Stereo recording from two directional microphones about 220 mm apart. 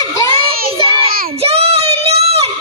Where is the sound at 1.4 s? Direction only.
25° right (ahead or behind).